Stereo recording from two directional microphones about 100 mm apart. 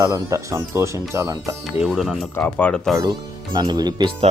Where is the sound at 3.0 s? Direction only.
45° right (ahead or behind).